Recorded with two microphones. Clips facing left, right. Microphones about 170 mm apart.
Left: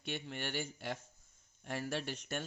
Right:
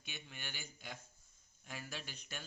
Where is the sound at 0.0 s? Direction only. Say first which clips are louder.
Left 11 dB; 65° left (ahead or behind).